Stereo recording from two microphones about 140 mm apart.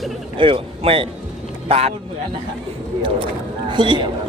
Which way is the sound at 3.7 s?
35° right (ahead or behind).